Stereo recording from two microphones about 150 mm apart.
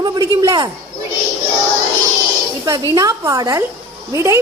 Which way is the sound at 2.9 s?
20° right (ahead or behind).